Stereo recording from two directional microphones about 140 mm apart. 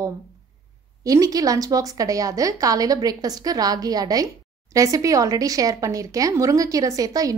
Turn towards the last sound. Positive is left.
turn(degrees=-25)  # may be behind; listen again after turning